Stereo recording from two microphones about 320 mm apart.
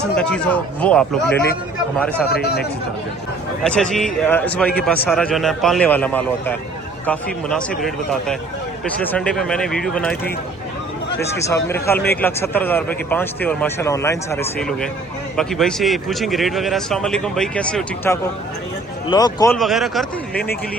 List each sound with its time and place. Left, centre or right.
0.0 s a man's voice: centre
2.3 s speech: left
3.6 s a man's voice: centre
11.2 s a man's voice: centre
19.5 s a man's voice: centre